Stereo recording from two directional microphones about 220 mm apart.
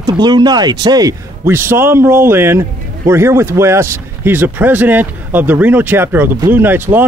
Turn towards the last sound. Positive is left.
turn(degrees=-10)  # may be behind; listen again after turning